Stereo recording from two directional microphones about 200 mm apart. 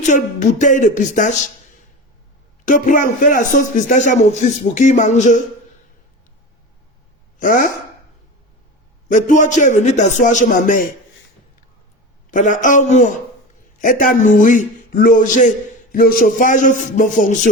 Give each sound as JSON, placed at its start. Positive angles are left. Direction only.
{"t": 0.0, "sound": "a man's voice", "side_deg": 35}
{"t": 2.6, "sound": "a man's voice", "side_deg": 40}
{"t": 7.3, "sound": "speech", "side_deg": 40}
{"t": 9.0, "sound": "a man's voice", "side_deg": 40}
{"t": 12.3, "sound": "a man's voice", "side_deg": 40}